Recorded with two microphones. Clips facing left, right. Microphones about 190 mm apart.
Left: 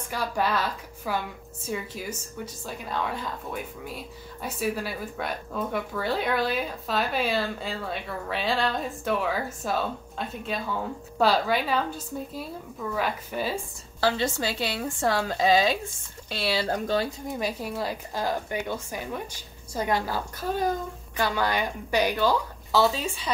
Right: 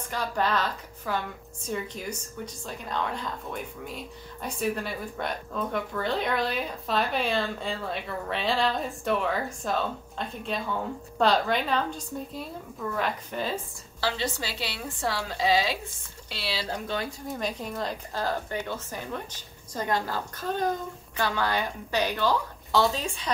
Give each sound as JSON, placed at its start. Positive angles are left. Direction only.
{"t": 0.1, "sound": "a woman's voice", "side_deg": 10}
{"t": 14.0, "sound": "a woman's voice", "side_deg": 50}
{"t": 17.4, "sound": "a woman's voice", "side_deg": 5}